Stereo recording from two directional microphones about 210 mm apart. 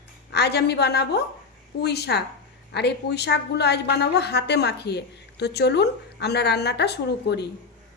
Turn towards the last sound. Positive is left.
turn(degrees=55)  # may be behind; listen again after turning